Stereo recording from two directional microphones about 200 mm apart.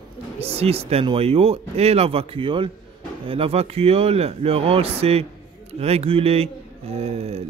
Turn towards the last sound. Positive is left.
turn(degrees=-30)  # may be behind; listen again after turning